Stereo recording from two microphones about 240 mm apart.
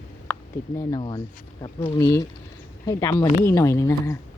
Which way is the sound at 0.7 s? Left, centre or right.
Centre.